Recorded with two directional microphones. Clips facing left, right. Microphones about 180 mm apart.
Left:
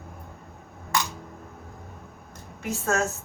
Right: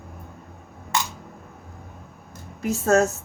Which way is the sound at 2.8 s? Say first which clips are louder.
Right 7 dB; 35° right (ahead or behind).